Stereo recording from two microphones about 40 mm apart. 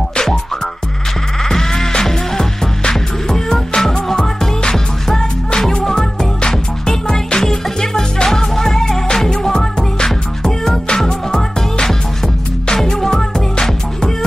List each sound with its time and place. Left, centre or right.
0.1 s music: centre
1.4 s music: centre
12.6 s music: centre